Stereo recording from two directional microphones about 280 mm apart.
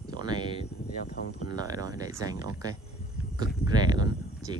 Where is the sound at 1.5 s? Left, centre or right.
Centre.